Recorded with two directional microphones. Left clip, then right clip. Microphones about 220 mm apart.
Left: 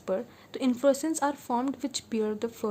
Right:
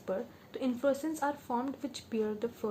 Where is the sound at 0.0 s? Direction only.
40° left (ahead or behind).